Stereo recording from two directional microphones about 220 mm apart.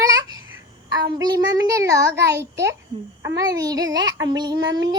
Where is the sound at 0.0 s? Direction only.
15° right (ahead or behind).